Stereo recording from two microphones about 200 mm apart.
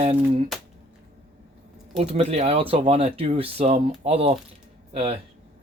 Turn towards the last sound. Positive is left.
turn(degrees=-30)  # may be behind; listen again after turning